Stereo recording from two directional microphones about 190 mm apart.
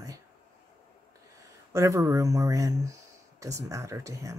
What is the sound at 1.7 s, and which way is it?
Speech, 15° right (ahead or behind).